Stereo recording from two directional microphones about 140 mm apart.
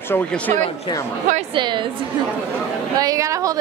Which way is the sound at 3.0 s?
25° right (ahead or behind).